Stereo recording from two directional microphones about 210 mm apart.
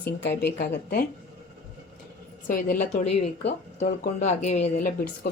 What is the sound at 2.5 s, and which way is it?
Speech, 40° left (ahead or behind).